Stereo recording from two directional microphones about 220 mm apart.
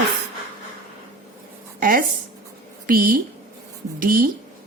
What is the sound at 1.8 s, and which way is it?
A woman's voice, 40° right (ahead or behind).